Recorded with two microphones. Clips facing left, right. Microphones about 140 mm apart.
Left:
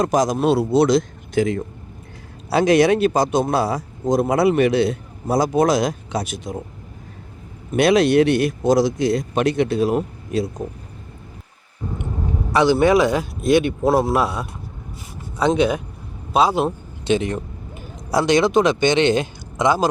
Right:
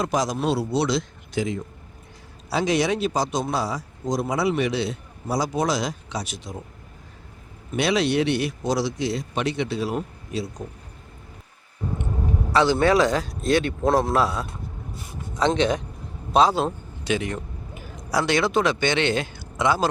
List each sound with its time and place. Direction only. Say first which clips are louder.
0.0 s a man's voice: left 6 dB; 45° left (ahead or behind)
7.8 s a man's voice: left 7 dB; 50° left (ahead or behind)
12.5 s a man's voice: left 4 dB; 15° left (ahead or behind)
17.0 s speech: left 6 dB; 25° left (ahead or behind)